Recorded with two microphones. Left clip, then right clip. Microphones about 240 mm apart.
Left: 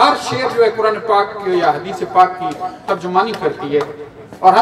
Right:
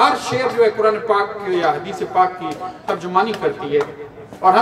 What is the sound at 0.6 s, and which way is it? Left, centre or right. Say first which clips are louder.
A man's voice: left 2 dB; centre.